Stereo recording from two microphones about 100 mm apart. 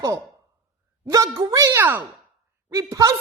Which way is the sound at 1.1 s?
35° right (ahead or behind).